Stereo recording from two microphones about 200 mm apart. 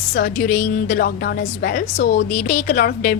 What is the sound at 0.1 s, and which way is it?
A woman's voice, 45° left (ahead or behind).